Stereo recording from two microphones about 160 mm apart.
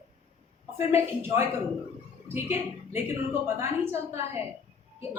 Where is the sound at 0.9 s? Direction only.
15° right (ahead or behind).